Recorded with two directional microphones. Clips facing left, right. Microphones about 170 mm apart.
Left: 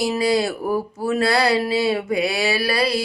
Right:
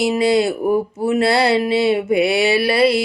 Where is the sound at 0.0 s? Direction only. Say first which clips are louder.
Right 4 dB; 25° right (ahead or behind).